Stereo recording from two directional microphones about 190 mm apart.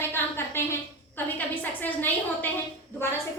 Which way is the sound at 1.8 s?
10° left (ahead or behind).